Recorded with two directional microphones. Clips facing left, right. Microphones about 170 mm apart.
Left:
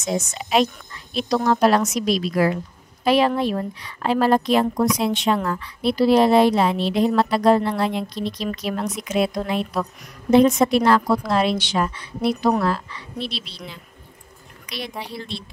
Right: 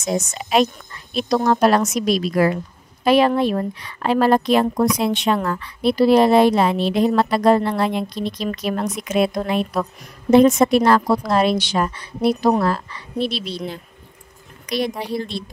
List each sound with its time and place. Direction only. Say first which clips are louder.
0.0 s speech: right 2 dB; 45° right (ahead or behind)
14.7 s speech: right 9 dB; 45° right (ahead or behind)